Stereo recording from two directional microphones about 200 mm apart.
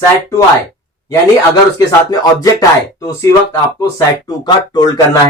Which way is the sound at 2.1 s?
20° left (ahead or behind).